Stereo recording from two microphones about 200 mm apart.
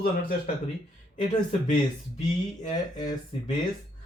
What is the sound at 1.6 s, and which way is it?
Speech, 40° left (ahead or behind).